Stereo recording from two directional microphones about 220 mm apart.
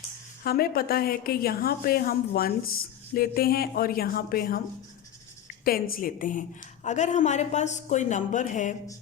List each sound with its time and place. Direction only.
0.4 s a woman's voice: 45° left (ahead or behind)
5.6 s a woman's voice: 40° left (ahead or behind)